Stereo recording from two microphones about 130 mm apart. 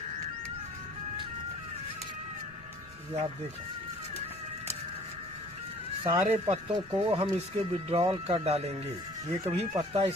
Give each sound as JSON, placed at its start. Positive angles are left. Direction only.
{"t": 6.0, "sound": "speech", "side_deg": -50}